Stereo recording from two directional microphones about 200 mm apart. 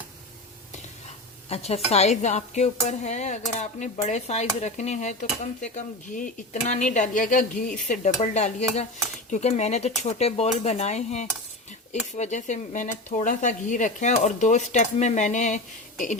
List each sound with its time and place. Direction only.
1.5 s speech: 30° left (ahead or behind)